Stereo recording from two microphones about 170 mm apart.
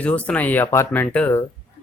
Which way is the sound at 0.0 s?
5° left (ahead or behind).